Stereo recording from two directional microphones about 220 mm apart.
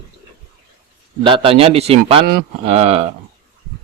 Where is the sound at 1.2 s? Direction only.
25° right (ahead or behind).